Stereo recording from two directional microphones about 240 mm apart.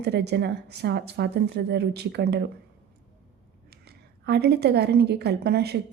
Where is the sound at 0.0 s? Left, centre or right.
Right.